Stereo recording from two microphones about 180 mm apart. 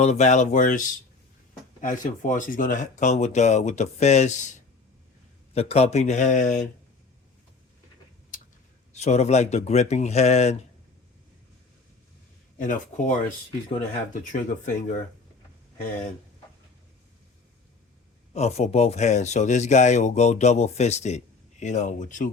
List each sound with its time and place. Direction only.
0.0 s speech: 40° left (ahead or behind)
5.5 s speech: 35° left (ahead or behind)
8.9 s speech: 40° left (ahead or behind)
12.5 s speech: 45° left (ahead or behind)
18.3 s speech: 35° left (ahead or behind)